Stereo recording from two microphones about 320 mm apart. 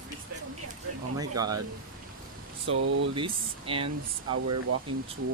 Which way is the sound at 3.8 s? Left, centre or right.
Right.